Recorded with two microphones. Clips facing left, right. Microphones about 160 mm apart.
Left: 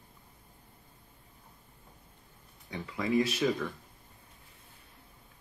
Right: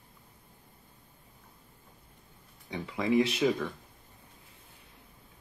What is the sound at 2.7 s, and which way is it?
Speech, 15° right (ahead or behind).